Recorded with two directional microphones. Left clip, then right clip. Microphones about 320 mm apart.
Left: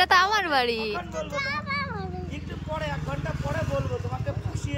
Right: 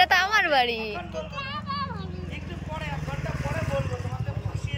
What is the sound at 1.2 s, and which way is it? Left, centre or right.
Child singing, left.